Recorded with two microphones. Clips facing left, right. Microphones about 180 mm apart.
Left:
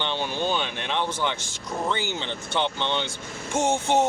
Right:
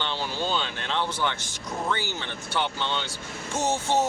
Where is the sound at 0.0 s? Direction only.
20° left (ahead or behind).